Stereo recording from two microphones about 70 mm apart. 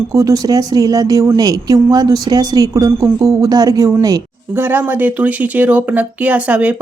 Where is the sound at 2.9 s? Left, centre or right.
Right.